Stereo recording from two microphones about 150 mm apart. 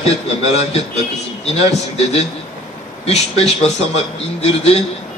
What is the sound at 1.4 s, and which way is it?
A man's voice, 40° left (ahead or behind).